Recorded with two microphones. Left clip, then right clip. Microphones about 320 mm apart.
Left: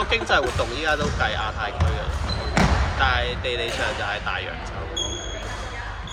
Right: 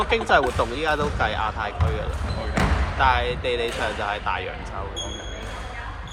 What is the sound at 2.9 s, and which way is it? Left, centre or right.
Speech, centre.